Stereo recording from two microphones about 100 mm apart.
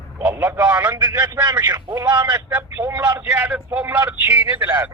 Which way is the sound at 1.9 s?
15° right (ahead or behind).